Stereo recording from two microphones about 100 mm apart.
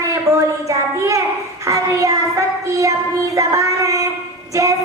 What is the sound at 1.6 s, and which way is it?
Child singing, 35° right (ahead or behind).